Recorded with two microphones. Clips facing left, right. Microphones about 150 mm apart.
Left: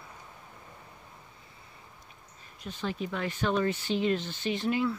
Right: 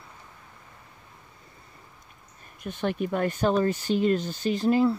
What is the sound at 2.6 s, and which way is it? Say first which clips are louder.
Speech: right 6 dB; 60° right (ahead or behind).